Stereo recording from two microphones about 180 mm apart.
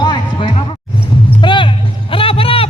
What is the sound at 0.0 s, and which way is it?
Music, 25° left (ahead or behind).